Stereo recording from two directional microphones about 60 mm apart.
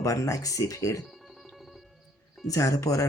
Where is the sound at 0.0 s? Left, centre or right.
Left.